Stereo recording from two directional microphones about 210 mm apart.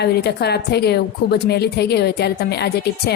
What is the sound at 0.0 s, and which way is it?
A woman's voice, 50° left (ahead or behind).